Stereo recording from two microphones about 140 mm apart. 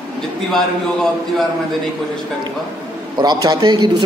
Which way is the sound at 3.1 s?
30° right (ahead or behind).